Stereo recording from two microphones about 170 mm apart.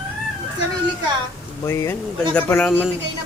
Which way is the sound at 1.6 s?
15° left (ahead or behind).